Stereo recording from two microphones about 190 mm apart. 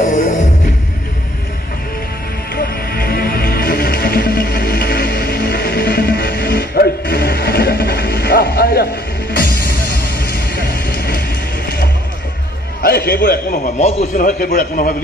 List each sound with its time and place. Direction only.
0.0 s music: 40° left (ahead or behind)
2.5 s music: 55° left (ahead or behind)
13.7 s a man's voice: 35° left (ahead or behind)